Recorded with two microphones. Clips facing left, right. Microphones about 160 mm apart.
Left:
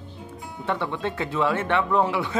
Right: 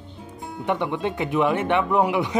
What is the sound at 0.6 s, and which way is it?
Speech, 15° right (ahead or behind).